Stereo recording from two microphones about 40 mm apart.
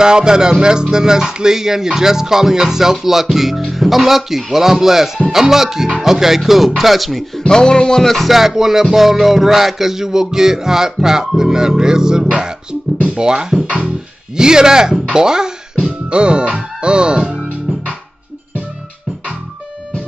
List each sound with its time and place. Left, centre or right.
0.0 s music: centre
5.9 s speech: centre
7.4 s music: centre
13.0 s speech: right
13.3 s speech: centre
13.8 s music: centre
15.8 s speech: right
17.7 s music: right